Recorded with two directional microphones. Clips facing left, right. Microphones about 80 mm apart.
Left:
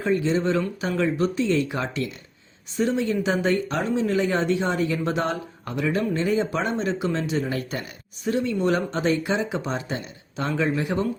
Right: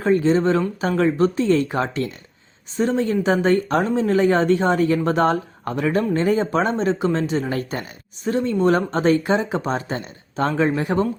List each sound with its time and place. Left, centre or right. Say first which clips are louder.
0.0 s speech: right 5 dB; right